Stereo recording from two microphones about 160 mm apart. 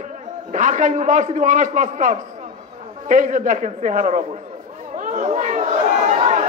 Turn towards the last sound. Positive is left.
turn(degrees=-50)  # may be behind; listen again after turning